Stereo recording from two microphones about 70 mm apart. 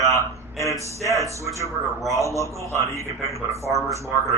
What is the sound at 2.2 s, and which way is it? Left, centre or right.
Speech, left.